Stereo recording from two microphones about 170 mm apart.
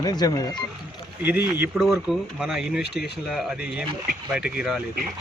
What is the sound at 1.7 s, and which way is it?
Speech, centre (ahead or behind).